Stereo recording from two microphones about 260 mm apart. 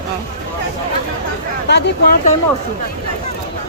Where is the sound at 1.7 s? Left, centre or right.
Left.